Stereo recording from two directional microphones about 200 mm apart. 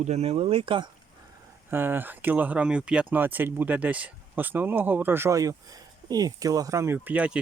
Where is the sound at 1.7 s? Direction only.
10° right (ahead or behind).